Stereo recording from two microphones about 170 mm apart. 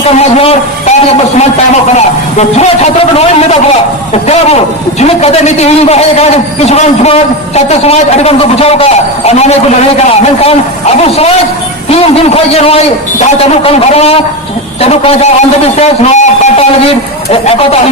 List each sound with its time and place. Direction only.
0.2 s a man's voice: 40° left (ahead or behind)
4.9 s a man's voice: 40° left (ahead or behind)